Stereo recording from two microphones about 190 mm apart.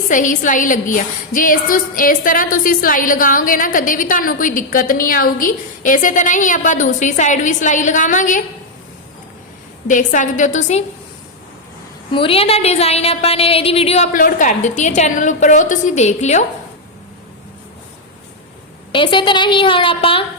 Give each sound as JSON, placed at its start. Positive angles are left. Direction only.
{"t": 0.1, "sound": "a woman's voice", "side_deg": 45}
{"t": 9.8, "sound": "a woman's voice", "side_deg": 40}
{"t": 12.1, "sound": "a woman's voice", "side_deg": 30}
{"t": 18.9, "sound": "a woman's voice", "side_deg": 25}